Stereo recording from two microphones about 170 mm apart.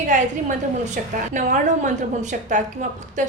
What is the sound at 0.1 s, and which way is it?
A woman's voice, 45° right (ahead or behind).